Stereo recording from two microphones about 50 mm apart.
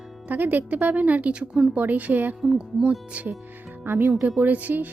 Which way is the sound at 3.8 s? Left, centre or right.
Right.